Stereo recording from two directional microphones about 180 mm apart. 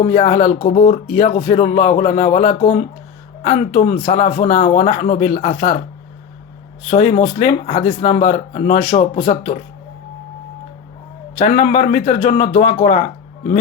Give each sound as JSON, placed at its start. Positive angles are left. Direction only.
{"t": 0.0, "sound": "speech", "side_deg": 35}
{"t": 6.8, "sound": "speech", "side_deg": 40}
{"t": 11.3, "sound": "speech", "side_deg": 40}